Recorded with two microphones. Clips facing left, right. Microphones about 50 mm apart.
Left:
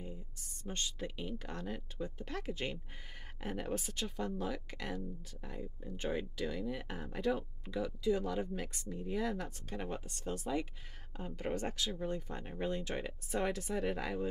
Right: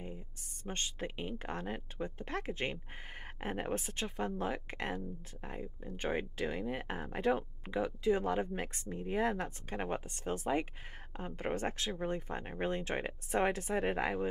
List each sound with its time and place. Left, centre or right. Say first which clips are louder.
0.7 s speech: right 1 dB; right